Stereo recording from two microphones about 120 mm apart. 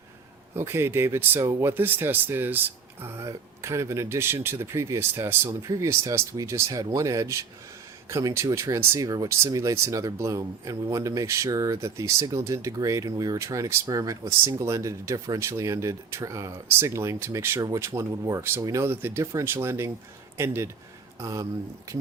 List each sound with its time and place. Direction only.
0.5 s speech: 20° right (ahead or behind)